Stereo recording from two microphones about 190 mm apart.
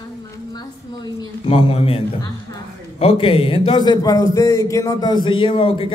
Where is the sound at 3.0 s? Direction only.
30° left (ahead or behind).